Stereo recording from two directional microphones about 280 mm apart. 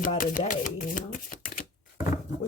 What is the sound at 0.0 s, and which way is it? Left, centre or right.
Shuffling cards, left.